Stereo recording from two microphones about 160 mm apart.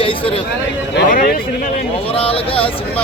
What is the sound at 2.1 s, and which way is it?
Speech, 35° left (ahead or behind).